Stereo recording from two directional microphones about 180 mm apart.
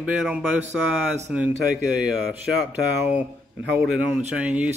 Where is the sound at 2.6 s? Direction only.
10° right (ahead or behind).